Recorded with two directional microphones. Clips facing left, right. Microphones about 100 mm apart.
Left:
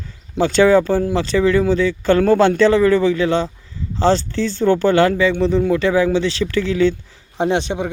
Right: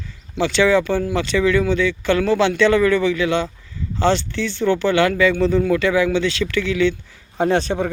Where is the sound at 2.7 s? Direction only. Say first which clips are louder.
Left 2 dB; 30° left (ahead or behind).